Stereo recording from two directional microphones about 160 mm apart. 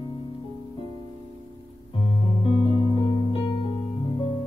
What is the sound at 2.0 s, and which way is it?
Music, 35° left (ahead or behind).